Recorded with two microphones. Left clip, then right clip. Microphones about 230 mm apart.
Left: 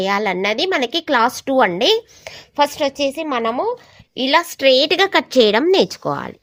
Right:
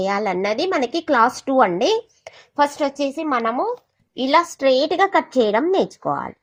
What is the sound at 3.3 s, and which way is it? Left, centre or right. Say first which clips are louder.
A woman's voice: left 1 dB; left.